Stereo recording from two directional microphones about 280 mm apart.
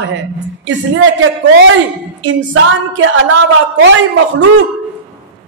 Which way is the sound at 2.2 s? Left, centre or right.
Right.